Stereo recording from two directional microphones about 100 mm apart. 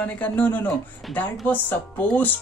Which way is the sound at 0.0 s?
15° left (ahead or behind).